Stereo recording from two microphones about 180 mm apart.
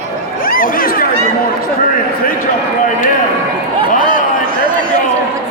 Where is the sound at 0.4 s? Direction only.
50° left (ahead or behind).